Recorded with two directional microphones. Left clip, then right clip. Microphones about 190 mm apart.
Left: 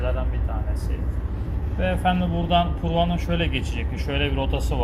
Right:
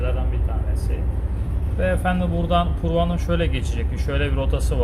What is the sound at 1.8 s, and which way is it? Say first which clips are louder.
Speech: right 1 dB; 20° right (ahead or behind).